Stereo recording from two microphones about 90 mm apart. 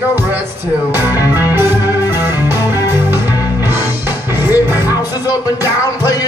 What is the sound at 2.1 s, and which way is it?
Music, 25° right (ahead or behind).